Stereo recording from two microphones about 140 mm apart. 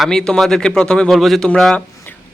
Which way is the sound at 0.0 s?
5° left (ahead or behind).